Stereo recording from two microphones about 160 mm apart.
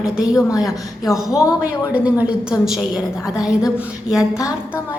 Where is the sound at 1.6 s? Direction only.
10° right (ahead or behind).